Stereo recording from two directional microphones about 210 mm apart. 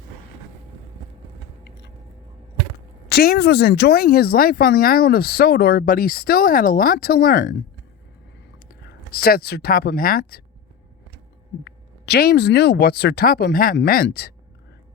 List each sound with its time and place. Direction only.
3.1 s speech: 50° left (ahead or behind)
8.8 s speech: 45° left (ahead or behind)
11.6 s speech: 50° left (ahead or behind)